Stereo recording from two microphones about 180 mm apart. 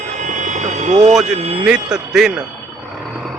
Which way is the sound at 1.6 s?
5° right (ahead or behind).